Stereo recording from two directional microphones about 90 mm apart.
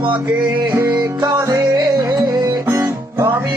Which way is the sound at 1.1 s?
55° right (ahead or behind).